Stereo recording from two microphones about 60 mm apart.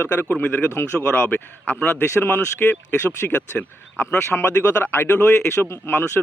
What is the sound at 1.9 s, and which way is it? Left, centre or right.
A man's voice, left.